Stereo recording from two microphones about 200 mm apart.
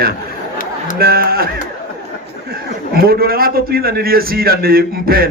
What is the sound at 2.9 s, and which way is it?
A man's voice, 50° right (ahead or behind).